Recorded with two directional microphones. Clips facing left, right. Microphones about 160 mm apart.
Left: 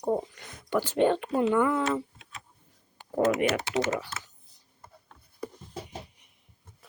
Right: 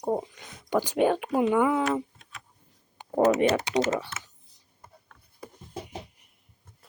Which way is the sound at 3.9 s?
30° right (ahead or behind).